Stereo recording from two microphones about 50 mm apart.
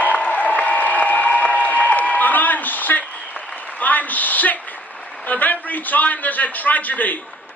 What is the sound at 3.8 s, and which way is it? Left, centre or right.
A woman's voice, left.